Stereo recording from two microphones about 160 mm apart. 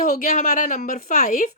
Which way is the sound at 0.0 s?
60° left (ahead or behind).